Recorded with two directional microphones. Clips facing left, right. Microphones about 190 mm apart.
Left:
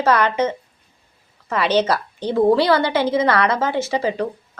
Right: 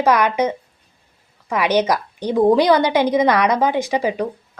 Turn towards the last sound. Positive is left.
turn(degrees=-15)  # may be behind; listen again after turning